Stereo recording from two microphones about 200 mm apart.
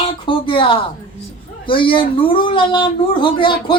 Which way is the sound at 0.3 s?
25° left (ahead or behind).